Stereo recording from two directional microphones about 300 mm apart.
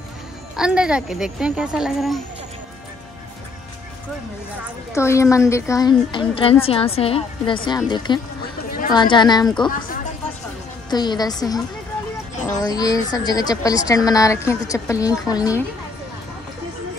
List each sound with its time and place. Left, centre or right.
0.6 s speech: centre
4.9 s a woman's voice: centre
8.6 s a sound: left
8.9 s a woman's voice: centre
10.9 s a woman's voice: centre